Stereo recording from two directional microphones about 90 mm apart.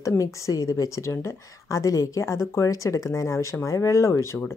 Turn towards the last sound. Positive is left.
turn(degrees=30)  # may be behind; listen again after turning